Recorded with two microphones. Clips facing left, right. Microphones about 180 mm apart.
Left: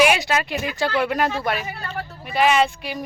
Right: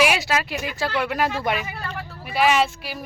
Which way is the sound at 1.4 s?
15° right (ahead or behind).